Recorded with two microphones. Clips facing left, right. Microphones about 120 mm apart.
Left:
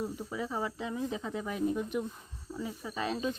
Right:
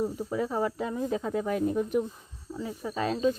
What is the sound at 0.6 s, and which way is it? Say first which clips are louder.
Speech: right 6 dB; 5° left (ahead or behind).